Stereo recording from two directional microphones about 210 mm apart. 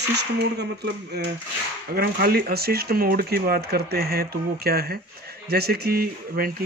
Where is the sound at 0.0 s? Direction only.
55° right (ahead or behind).